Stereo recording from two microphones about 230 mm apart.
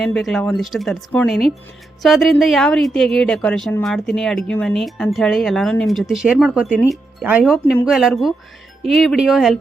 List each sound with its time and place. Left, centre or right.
0.0 s a woman's voice: centre